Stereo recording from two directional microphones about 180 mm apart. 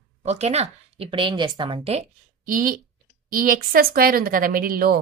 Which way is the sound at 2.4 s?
50° right (ahead or behind).